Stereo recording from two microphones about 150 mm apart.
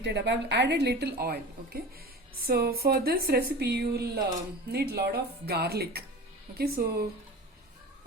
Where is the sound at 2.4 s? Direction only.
90° right.